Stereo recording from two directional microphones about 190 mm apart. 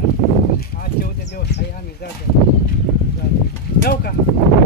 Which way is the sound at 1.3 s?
60° left (ahead or behind).